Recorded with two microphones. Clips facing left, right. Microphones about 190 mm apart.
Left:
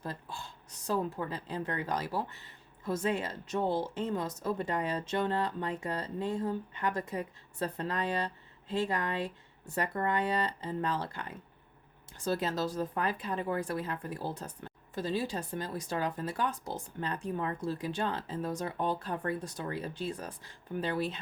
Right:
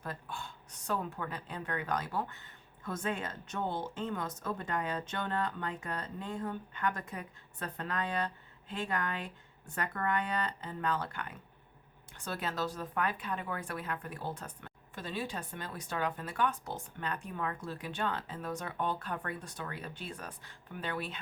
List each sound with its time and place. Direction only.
0.9 s speech: 35° left (ahead or behind)